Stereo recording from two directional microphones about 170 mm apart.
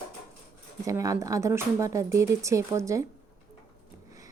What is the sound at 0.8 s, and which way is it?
A woman's voice, 20° right (ahead or behind).